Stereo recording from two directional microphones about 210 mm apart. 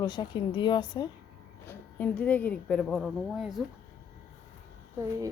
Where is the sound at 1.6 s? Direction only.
10° left (ahead or behind).